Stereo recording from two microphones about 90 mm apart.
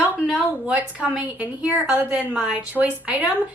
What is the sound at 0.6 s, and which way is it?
A woman's voice, 15° right (ahead or behind).